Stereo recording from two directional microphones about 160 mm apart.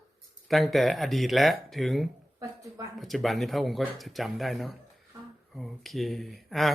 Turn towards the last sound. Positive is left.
turn(degrees=0)  # may be behind; listen again after turning